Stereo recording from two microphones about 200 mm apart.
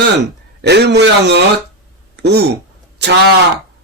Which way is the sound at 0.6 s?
55° right (ahead or behind).